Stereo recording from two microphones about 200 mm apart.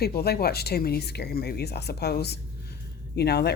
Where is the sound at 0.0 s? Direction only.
50° left (ahead or behind).